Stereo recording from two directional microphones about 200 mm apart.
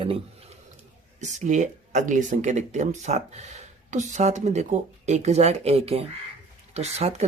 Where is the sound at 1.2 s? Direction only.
35° right (ahead or behind).